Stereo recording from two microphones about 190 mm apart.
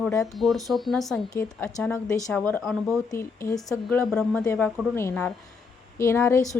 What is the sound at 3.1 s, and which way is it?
Speech, 15° left (ahead or behind).